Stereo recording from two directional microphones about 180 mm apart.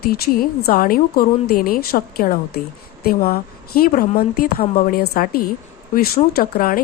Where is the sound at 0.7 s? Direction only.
55° left (ahead or behind).